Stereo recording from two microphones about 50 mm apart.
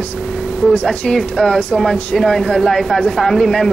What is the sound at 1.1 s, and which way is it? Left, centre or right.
A woman's voice, centre.